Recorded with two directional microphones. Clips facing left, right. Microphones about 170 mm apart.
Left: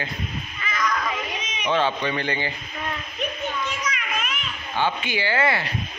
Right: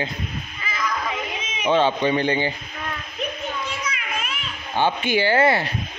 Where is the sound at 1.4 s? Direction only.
25° right (ahead or behind).